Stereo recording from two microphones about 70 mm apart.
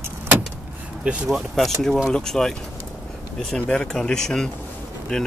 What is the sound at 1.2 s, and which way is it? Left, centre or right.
Speech, centre.